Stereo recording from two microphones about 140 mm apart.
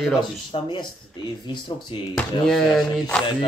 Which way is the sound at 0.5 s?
40° left (ahead or behind).